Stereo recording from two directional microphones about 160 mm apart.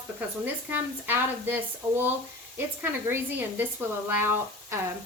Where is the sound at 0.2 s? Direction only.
10° right (ahead or behind).